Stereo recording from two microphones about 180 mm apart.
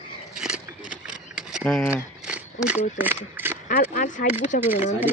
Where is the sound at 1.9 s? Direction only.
5° right (ahead or behind).